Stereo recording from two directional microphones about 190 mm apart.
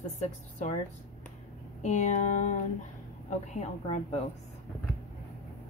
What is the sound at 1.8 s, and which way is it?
A woman's voice, 40° left (ahead or behind).